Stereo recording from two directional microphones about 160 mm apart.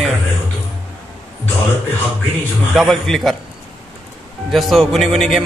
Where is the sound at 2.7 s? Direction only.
Centre (ahead or behind).